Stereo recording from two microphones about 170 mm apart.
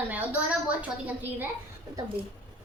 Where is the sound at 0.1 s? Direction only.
10° right (ahead or behind).